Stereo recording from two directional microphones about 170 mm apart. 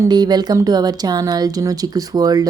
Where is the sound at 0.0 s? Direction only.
25° right (ahead or behind).